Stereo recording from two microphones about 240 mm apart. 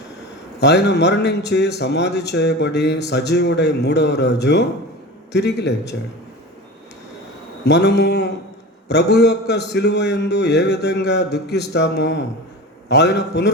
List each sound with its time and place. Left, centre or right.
0.6 s a man's voice: left
7.6 s a man's voice: left